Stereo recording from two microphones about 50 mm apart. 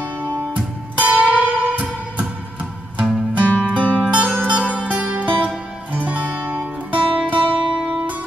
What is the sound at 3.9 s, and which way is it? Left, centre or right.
Zither, right.